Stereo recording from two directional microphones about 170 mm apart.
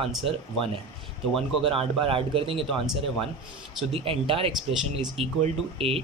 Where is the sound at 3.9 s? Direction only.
35° right (ahead or behind).